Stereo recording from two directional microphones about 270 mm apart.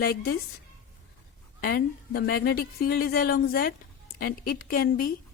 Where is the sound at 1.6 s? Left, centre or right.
Left.